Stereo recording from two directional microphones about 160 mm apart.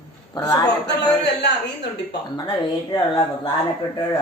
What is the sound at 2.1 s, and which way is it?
Speech, 25° left (ahead or behind).